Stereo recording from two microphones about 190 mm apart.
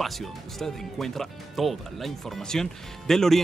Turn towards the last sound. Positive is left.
turn(degrees=0)  # may be behind; listen again after turning